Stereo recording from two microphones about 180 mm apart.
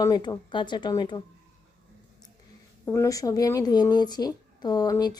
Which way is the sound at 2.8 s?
15° left (ahead or behind).